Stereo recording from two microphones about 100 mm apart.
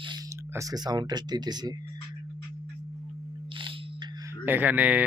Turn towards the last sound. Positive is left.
turn(degrees=-15)  # may be behind; listen again after turning